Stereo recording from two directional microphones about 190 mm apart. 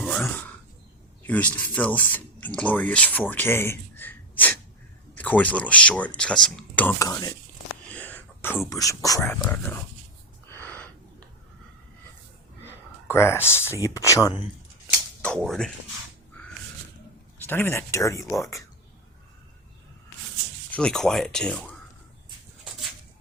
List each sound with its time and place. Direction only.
0.0 s throat clearing: 5° left (ahead or behind)
1.2 s speech: 10° left (ahead or behind)
7.9 s a sound: 10° left (ahead or behind)
8.7 s speech: 15° left (ahead or behind)
10.5 s a sound: 10° left (ahead or behind)
12.6 s a sound: 10° left (ahead or behind)
13.8 s speech: 15° left (ahead or behind)
15.4 s speech: centre (ahead or behind)
17.3 s speech: 10° left (ahead or behind)
20.7 s speech: 5° left (ahead or behind)